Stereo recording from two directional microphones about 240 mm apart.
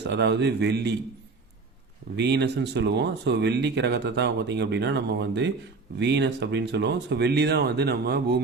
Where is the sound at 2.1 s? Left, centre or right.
Right.